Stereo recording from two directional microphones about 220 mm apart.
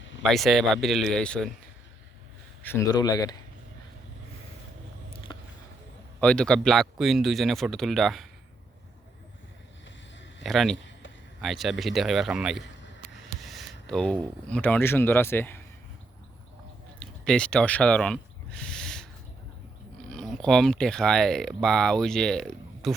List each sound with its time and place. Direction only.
0.2 s a man's voice: centre (ahead or behind)
2.6 s a man's voice: 15° left (ahead or behind)
5.3 s a sound: 20° left (ahead or behind)
6.1 s a man's voice: 5° left (ahead or behind)
10.4 s a man's voice: centre (ahead or behind)
17.0 s a sound: 5° left (ahead or behind)
20.1 s speech: 5° left (ahead or behind)